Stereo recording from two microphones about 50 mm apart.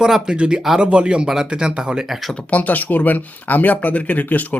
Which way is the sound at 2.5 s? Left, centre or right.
Left.